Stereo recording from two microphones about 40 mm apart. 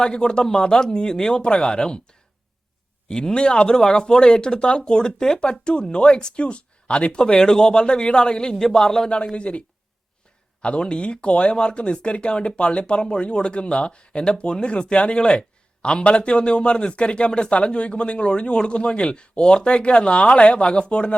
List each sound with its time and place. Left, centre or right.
0.0 s speech: left
9.0 s speech: left